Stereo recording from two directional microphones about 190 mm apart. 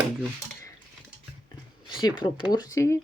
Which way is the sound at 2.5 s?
20° left (ahead or behind).